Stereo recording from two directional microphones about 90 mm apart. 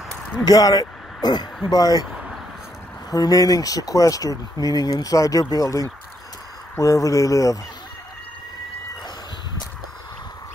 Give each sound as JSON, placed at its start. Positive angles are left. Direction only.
{"t": 0.5, "sound": "speech", "side_deg": 45}
{"t": 3.1, "sound": "speech", "side_deg": 45}
{"t": 6.8, "sound": "speech", "side_deg": 40}